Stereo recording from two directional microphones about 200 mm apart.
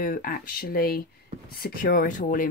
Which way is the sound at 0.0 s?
45° left (ahead or behind).